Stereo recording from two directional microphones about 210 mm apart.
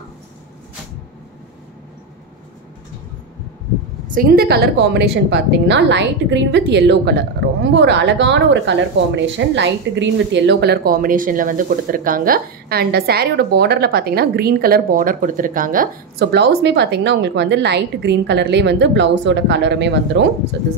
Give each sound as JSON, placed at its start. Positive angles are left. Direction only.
{"t": 4.1, "sound": "a woman's voice", "side_deg": -45}